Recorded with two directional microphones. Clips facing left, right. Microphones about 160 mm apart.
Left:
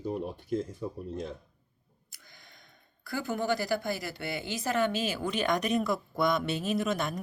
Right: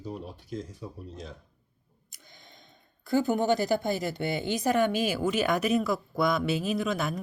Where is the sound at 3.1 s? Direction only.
20° right (ahead or behind).